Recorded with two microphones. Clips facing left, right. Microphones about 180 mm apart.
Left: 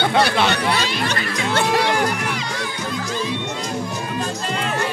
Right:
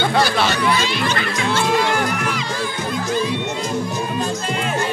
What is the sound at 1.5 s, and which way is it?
Speech, 65° left (ahead or behind).